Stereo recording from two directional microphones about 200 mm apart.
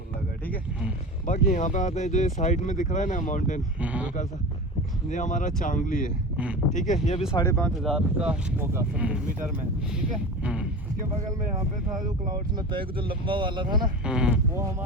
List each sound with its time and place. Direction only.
1.3 s speech: 40° left (ahead or behind)
3.8 s speech: 5° right (ahead or behind)
5.1 s speech: 40° left (ahead or behind)
6.3 s speech: 5° right (ahead or behind)
6.7 s speech: 35° left (ahead or behind)
7.5 s speech: 5° left (ahead or behind)
12.7 s speech: 25° right (ahead or behind)
14.0 s speech: 5° right (ahead or behind)
14.5 s speech: 15° right (ahead or behind)